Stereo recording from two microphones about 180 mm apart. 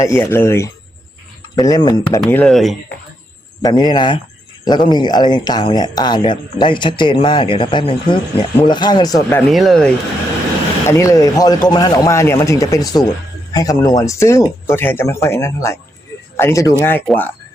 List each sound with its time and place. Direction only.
0.0 s speech: 15° left (ahead or behind)
2.2 s speech: 5° left (ahead or behind)
3.6 s speech: 25° left (ahead or behind)
9.5 s speech: centre (ahead or behind)
10.8 s a man's voice: 15° left (ahead or behind)